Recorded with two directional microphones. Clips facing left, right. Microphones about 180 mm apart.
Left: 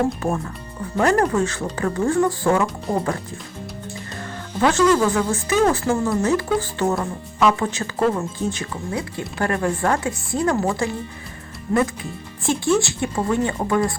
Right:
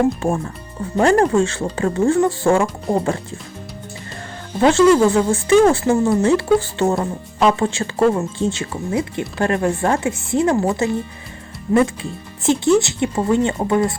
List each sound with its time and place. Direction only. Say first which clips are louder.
0.2 s speech: right 3 dB; 30° right (ahead or behind)
4.6 s speech: right 5 dB; 25° right (ahead or behind)